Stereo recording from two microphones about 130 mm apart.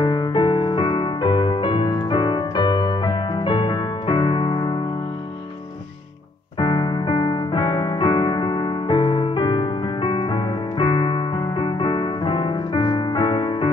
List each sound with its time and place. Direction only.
0.0 s music: 35° left (ahead or behind)
6.6 s keyboard: 35° left (ahead or behind)